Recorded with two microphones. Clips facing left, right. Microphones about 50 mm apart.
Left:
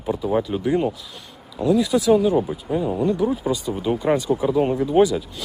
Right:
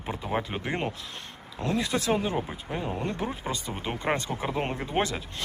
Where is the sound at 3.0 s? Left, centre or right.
Right.